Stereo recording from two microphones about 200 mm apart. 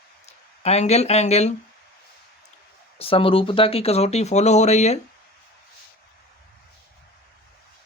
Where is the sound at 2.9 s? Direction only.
30° left (ahead or behind).